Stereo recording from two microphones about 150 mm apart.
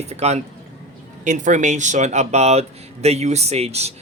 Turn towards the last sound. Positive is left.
turn(degrees=-45)  # may be behind; listen again after turning